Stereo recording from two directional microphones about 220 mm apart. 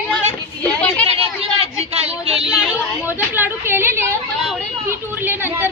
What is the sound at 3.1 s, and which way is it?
Chatter, 10° right (ahead or behind).